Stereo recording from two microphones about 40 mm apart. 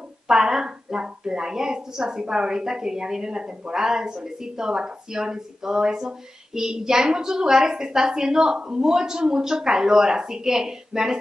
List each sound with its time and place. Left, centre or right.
0.3 s a woman's voice: centre